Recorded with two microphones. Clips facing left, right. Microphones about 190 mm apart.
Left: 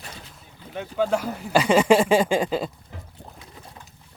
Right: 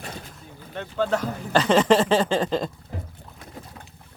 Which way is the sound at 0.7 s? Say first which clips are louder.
Left 1 dB; 10° left (ahead or behind).